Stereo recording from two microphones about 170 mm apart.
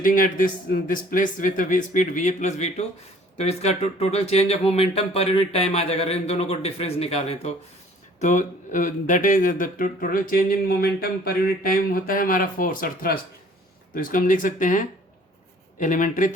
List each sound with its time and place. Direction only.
0.0 s a man's voice: 55° left (ahead or behind)